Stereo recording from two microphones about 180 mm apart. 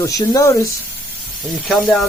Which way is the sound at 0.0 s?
20° left (ahead or behind).